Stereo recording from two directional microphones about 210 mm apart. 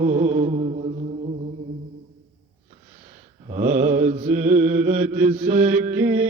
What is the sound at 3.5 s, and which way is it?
Mantra, 35° right (ahead or behind).